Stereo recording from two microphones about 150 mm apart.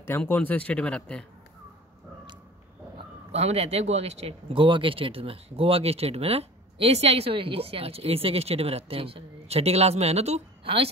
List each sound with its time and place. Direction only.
0.2 s speech: 10° left (ahead or behind)
3.3 s speech: 45° right (ahead or behind)